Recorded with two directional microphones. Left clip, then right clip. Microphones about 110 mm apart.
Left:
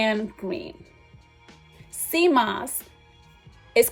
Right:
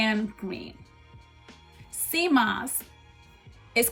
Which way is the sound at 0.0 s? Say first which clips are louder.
Left 3 dB; 30° left (ahead or behind).